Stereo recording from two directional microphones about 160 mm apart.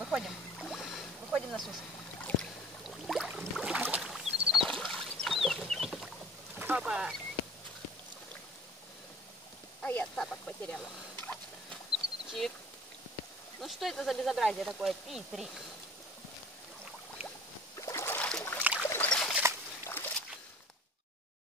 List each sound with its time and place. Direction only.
0.0 s boat: centre (ahead or behind)
6.5 s boat: 10° right (ahead or behind)
9.8 s a sound: 10° left (ahead or behind)
12.3 s speech: centre (ahead or behind)
13.6 s speech: centre (ahead or behind)
17.7 s boat: 15° left (ahead or behind)
18.6 s boat: 10° right (ahead or behind)
18.9 s boat: 10° left (ahead or behind)
19.9 s a sound: 15° left (ahead or behind)